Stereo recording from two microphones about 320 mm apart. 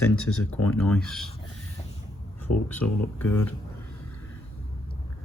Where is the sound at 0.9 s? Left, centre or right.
Centre.